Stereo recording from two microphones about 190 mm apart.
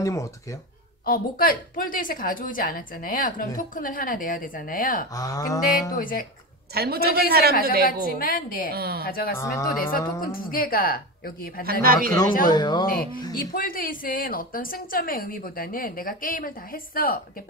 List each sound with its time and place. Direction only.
0.0 s speech: 15° left (ahead or behind)
1.0 s a woman's voice: 50° left (ahead or behind)
5.1 s a sound: 20° left (ahead or behind)
5.9 s a woman's voice: 45° left (ahead or behind)
6.7 s speech: 55° right (ahead or behind)
8.2 s a woman's voice: 50° left (ahead or behind)
8.7 s speech: 55° right (ahead or behind)
9.0 s a woman's voice: 50° left (ahead or behind)
9.4 s speech: 15° left (ahead or behind)
9.8 s a woman's voice: 50° left (ahead or behind)
11.8 s speech: 50° right (ahead or behind)
12.4 s a sound: 20° left (ahead or behind)
12.9 s a woman's voice: 50° left (ahead or behind)